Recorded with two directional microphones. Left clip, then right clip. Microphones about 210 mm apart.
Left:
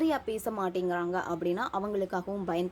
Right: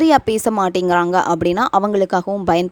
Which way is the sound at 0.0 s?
50° right (ahead or behind).